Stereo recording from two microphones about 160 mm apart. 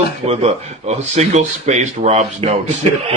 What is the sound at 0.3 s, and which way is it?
Speech, 40° right (ahead or behind).